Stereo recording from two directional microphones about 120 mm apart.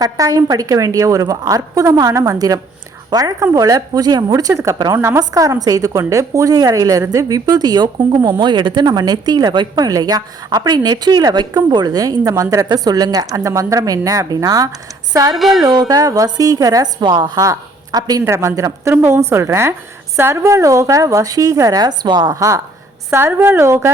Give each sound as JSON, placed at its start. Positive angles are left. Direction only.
{"t": 0.0, "sound": "a woman's voice", "side_deg": -30}
{"t": 15.4, "sound": "speech", "side_deg": 0}
{"t": 15.6, "sound": "a woman's voice", "side_deg": -30}